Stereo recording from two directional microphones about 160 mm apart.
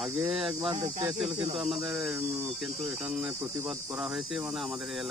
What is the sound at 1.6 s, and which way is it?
Speech, centre (ahead or behind).